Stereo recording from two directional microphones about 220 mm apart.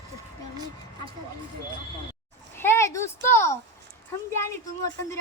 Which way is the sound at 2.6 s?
10° left (ahead or behind).